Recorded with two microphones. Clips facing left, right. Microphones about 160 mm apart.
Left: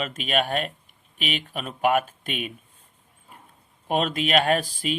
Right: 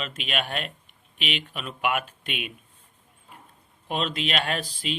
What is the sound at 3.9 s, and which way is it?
Speech, 50° left (ahead or behind).